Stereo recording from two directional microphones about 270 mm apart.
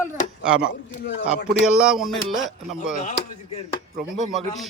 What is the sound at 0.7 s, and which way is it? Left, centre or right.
Speech, left.